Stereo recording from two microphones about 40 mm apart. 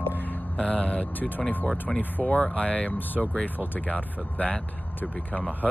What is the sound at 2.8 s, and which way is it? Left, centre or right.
Speech, left.